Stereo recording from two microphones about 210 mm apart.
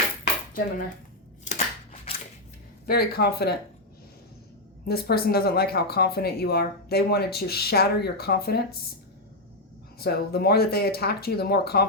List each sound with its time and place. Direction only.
1.5 s scissors: 30° left (ahead or behind)
2.8 s speech: 45° left (ahead or behind)
4.9 s speech: 50° left (ahead or behind)
10.0 s speech: 50° left (ahead or behind)